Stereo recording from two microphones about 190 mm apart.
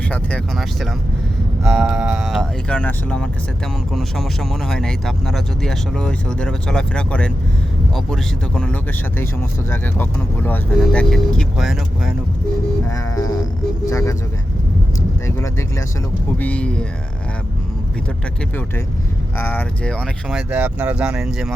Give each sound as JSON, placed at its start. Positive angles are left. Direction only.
{"t": 0.1, "sound": "speech", "side_deg": 5}
{"t": 12.9, "sound": "speech", "side_deg": 15}
{"t": 16.4, "sound": "speech", "side_deg": 5}
{"t": 19.4, "sound": "speech", "side_deg": 10}
{"t": 20.5, "sound": "speech", "side_deg": -10}